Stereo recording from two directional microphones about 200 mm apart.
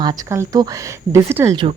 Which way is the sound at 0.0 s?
20° right (ahead or behind).